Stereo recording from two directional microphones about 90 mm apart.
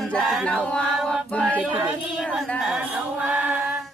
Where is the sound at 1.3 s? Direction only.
15° left (ahead or behind).